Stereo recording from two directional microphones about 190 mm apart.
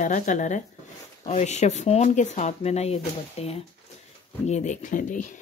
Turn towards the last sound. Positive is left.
turn(degrees=40)  # may be behind; listen again after turning